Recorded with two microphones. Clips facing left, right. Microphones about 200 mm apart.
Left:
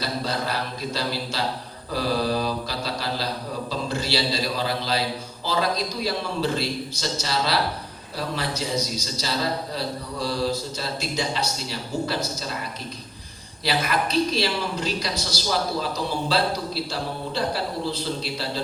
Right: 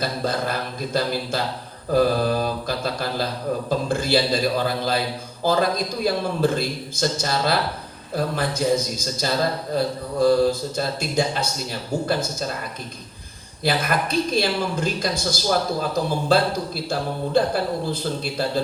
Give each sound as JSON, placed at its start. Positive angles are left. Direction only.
{"t": 0.0, "sound": "a man's voice", "side_deg": -50}
{"t": 13.7, "sound": "a man's voice", "side_deg": -50}